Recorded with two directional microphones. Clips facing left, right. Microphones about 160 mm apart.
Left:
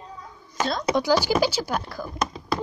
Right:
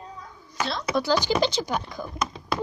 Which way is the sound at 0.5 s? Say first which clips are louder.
Left 3 dB; 45° left (ahead or behind).